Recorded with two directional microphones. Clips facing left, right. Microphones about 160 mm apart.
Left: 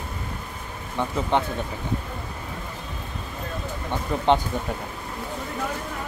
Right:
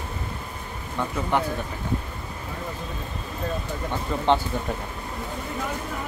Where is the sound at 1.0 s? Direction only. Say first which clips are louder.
Left 2 dB; 20° left (ahead or behind).